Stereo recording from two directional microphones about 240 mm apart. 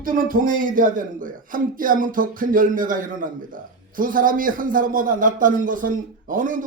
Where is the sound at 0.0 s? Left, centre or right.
Right.